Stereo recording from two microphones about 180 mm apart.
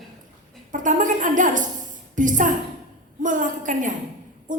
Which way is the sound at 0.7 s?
45° right (ahead or behind).